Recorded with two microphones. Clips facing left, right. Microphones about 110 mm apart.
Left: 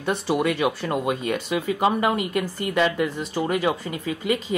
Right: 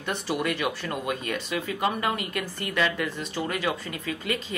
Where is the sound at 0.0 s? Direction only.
35° left (ahead or behind).